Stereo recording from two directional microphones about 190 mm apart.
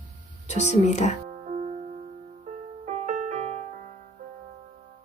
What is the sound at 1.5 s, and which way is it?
Music, 35° right (ahead or behind).